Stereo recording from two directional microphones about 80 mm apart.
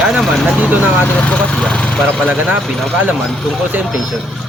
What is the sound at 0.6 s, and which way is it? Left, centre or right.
Vehicle, right.